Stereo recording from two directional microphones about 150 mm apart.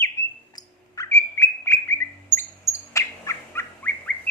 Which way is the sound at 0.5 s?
20° left (ahead or behind).